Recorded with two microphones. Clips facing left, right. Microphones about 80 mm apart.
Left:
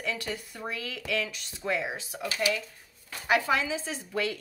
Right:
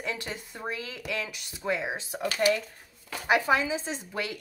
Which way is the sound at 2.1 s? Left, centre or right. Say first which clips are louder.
Right 5 dB; right.